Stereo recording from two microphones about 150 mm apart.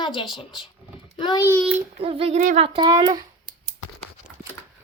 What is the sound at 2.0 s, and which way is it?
Speech, 40° right (ahead or behind).